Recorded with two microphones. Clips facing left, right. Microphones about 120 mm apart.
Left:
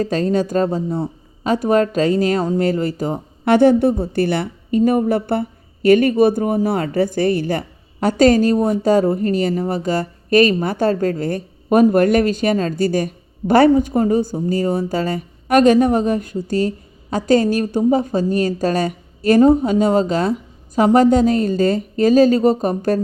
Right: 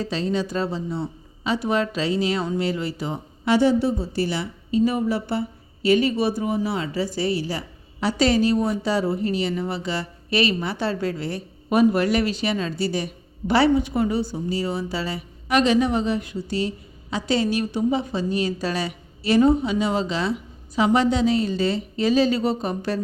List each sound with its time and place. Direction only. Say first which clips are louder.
0.0 s a woman's voice: left 7 dB; 45° left (ahead or behind)